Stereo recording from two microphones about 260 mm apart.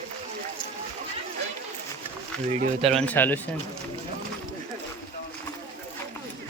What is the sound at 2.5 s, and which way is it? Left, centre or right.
Speech, right.